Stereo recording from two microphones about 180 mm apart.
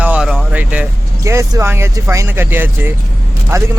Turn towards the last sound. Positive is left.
turn(degrees=-15)  # may be behind; listen again after turning